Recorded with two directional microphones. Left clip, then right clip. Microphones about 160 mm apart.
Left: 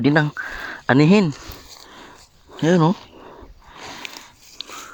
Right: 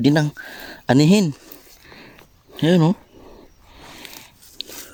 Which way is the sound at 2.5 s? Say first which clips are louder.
Left 1 dB; 35° right (ahead or behind).